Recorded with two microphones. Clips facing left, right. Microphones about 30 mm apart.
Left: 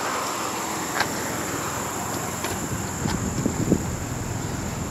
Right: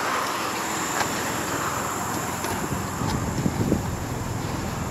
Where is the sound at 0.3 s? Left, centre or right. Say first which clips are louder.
Right 1 dB; right.